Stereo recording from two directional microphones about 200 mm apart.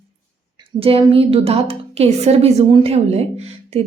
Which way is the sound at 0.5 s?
30° right (ahead or behind).